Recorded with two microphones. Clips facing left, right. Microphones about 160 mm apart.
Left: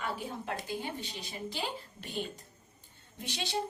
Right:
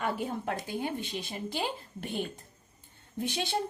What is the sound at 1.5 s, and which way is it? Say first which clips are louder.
A woman's voice: right 2 dB; 55° right (ahead or behind).